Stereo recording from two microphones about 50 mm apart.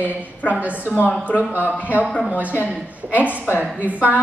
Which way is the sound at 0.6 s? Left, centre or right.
Left.